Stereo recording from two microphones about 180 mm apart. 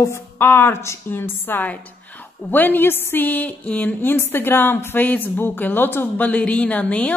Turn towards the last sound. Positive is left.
turn(degrees=5)  # may be behind; listen again after turning